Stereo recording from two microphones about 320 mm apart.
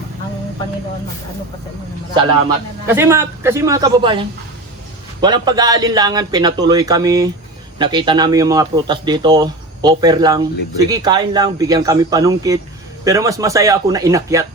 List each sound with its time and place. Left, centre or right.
2.8 s speech: centre